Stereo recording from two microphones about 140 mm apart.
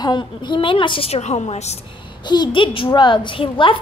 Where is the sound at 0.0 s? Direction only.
30° left (ahead or behind); by 1.8 s 50° left (ahead or behind).